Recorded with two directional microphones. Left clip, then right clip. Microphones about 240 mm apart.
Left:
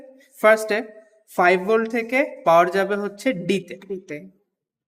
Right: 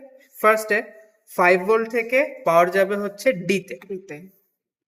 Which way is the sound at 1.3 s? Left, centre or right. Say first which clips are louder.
Even; left.